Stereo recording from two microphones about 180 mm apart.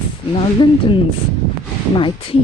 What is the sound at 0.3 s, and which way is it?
Speech, 30° left (ahead or behind).